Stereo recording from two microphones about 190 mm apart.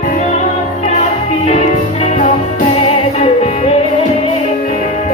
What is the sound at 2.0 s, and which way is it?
Music, 35° left (ahead or behind).